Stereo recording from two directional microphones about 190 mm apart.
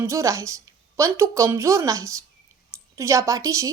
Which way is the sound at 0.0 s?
15° right (ahead or behind).